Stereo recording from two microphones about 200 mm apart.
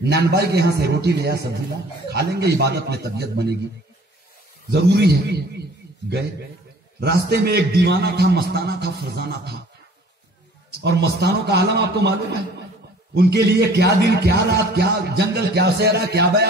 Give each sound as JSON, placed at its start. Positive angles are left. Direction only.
{"t": 0.0, "sound": "a man's voice", "side_deg": -55}
{"t": 4.6, "sound": "a man's voice", "side_deg": -55}
{"t": 7.0, "sound": "a man's voice", "side_deg": -55}
{"t": 10.7, "sound": "a man's voice", "side_deg": -55}